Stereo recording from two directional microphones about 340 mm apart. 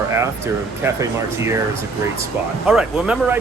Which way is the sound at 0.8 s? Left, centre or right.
Centre.